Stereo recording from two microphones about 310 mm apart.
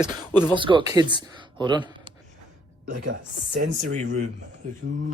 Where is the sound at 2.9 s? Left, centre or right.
Right.